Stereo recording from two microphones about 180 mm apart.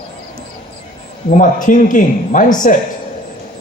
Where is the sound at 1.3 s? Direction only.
45° left (ahead or behind).